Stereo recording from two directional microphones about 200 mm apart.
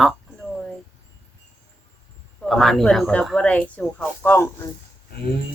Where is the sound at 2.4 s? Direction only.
Centre (ahead or behind).